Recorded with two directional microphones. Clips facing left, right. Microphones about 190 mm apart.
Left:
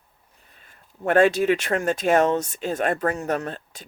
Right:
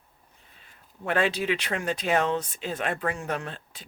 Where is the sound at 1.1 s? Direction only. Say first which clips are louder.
Left 8 dB; 45° left (ahead or behind).